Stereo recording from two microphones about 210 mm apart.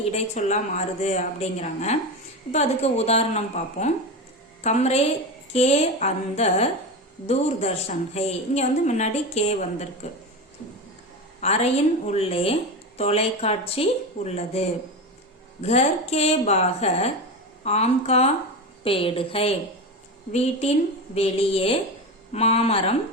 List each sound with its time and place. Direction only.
0.1 s a woman's voice: 30° left (ahead or behind)
11.3 s a woman's voice: 30° left (ahead or behind)